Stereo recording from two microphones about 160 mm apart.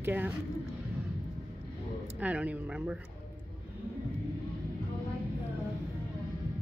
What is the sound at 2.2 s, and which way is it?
Speech, 10° right (ahead or behind).